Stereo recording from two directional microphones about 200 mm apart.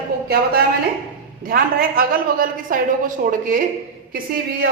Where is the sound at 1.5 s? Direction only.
45° right (ahead or behind).